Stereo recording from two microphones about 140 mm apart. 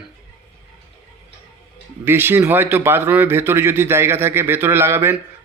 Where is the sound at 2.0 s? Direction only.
15° right (ahead or behind).